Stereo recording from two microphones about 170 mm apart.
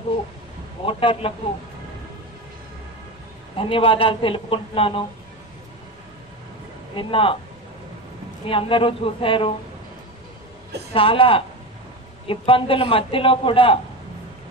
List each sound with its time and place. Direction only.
0.8 s a man's voice: 30° left (ahead or behind)
3.5 s a man's voice: 30° left (ahead or behind)
7.0 s a man's voice: 30° left (ahead or behind)
8.5 s a man's voice: 30° left (ahead or behind)
10.9 s a man's voice: 30° left (ahead or behind)